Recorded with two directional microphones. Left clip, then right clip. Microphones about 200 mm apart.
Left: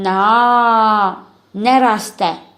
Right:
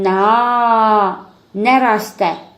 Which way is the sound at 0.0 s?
30° left (ahead or behind).